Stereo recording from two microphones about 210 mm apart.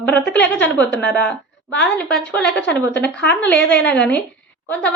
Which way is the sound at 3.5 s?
55° left (ahead or behind).